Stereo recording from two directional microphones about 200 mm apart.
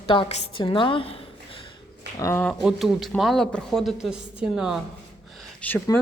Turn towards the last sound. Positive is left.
turn(degrees=10)  # may be behind; listen again after turning